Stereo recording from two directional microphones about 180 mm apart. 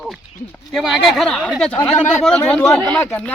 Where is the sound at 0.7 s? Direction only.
Centre (ahead or behind).